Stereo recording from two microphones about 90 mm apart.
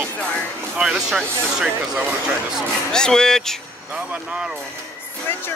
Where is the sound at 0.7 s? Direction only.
5° right (ahead or behind).